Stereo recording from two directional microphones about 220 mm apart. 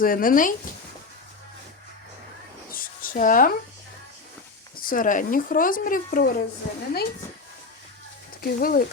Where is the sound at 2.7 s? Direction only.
40° left (ahead or behind).